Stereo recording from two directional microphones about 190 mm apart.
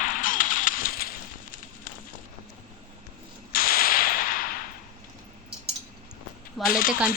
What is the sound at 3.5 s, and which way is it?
Whip, 50° left (ahead or behind).